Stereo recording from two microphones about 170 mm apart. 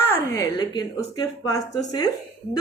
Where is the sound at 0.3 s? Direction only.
25° left (ahead or behind).